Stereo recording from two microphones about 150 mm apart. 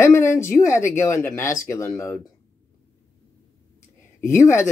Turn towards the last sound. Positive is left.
turn(degrees=15)  # may be behind; listen again after turning